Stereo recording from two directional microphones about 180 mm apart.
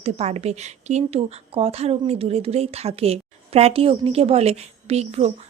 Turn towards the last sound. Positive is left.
turn(degrees=-35)  # may be behind; listen again after turning